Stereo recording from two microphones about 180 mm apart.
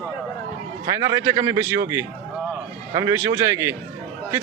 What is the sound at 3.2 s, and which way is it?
Speech, 15° right (ahead or behind).